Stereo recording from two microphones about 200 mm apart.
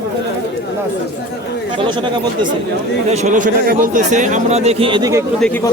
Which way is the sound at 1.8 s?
25° right (ahead or behind).